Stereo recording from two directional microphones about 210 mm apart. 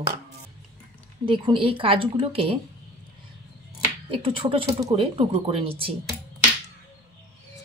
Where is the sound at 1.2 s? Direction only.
25° right (ahead or behind).